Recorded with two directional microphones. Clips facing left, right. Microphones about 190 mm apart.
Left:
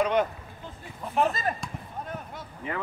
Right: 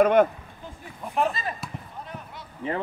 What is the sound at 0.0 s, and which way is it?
Speech, 50° right (ahead or behind).